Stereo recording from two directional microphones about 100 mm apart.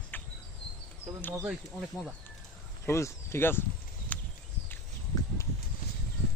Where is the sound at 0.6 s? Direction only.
10° left (ahead or behind).